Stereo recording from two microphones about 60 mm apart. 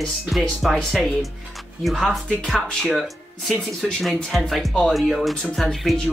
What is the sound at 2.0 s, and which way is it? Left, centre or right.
Speech, centre.